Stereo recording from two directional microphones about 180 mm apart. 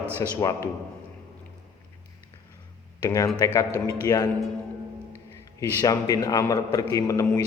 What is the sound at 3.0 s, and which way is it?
A man's voice, 20° left (ahead or behind).